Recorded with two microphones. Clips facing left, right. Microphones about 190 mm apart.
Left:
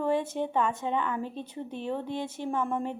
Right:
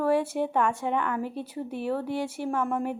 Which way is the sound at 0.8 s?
20° left (ahead or behind).